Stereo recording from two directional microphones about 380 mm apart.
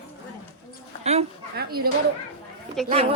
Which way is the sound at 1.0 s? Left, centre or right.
Right.